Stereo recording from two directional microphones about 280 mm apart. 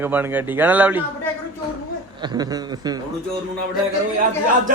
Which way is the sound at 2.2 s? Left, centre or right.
Centre.